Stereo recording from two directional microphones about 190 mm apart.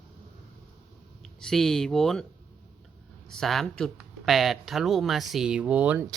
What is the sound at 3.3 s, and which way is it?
Speech, centre (ahead or behind).